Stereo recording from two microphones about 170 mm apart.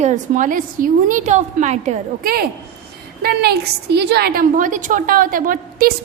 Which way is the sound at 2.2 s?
65° right (ahead or behind).